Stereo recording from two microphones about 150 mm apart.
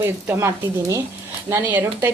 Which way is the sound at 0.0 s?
20° right (ahead or behind).